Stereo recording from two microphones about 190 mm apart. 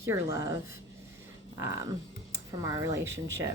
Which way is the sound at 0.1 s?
15° right (ahead or behind).